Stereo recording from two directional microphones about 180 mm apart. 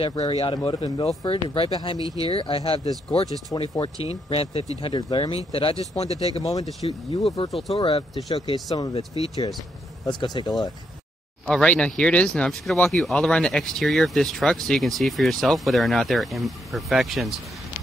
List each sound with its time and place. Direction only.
0.0 s speech: 30° left (ahead or behind)
0.6 s speech: 25° left (ahead or behind)
3.5 s speech: 15° left (ahead or behind)
3.8 s speech: 35° left (ahead or behind)
6.5 s speech: 25° left (ahead or behind)
8.5 s speech: 20° left (ahead or behind)
10.0 s speech: 25° left (ahead or behind)
11.4 s speech: 5° left (ahead or behind)